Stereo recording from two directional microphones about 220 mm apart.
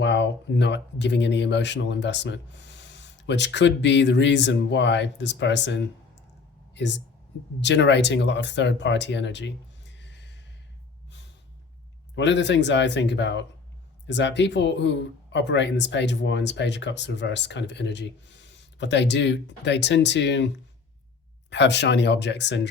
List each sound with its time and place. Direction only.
0.0 s speech: 50° left (ahead or behind)
12.1 s speech: 55° left (ahead or behind)
21.5 s speech: 50° left (ahead or behind)